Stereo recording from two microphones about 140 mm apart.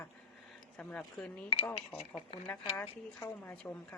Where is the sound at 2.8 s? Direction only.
15° left (ahead or behind).